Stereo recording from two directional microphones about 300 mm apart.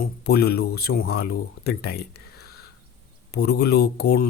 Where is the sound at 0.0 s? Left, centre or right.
Left.